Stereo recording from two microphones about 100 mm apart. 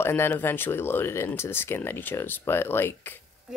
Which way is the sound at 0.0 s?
20° left (ahead or behind).